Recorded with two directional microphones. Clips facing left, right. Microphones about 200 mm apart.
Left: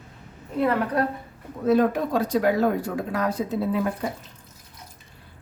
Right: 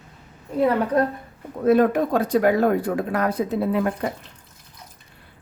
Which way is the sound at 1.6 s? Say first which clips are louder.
Right 3 dB; 55° right (ahead or behind).